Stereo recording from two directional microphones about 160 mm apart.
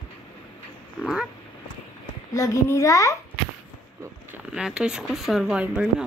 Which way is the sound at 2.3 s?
20° left (ahead or behind).